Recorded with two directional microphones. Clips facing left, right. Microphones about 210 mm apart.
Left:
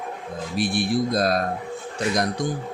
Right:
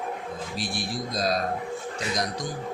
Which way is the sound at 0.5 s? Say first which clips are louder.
Left 11 dB; 60° left (ahead or behind).